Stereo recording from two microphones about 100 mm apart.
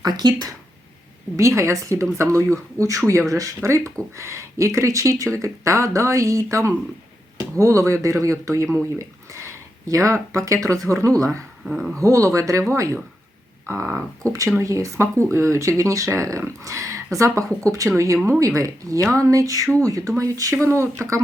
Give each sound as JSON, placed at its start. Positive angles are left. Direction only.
{"t": 0.0, "sound": "speech", "side_deg": -45}
{"t": 1.4, "sound": "a woman's voice", "side_deg": -30}
{"t": 11.6, "sound": "speech", "side_deg": -5}
{"t": 11.9, "sound": "a woman's voice", "side_deg": -35}